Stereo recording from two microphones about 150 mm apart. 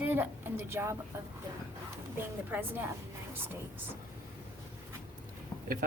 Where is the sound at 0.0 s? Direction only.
15° right (ahead or behind).